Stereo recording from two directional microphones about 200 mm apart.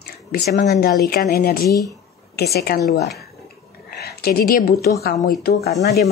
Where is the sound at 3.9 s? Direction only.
50° left (ahead or behind).